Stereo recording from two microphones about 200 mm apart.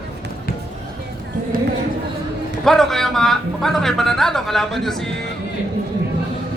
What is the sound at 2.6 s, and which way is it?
A man's voice, centre (ahead or behind).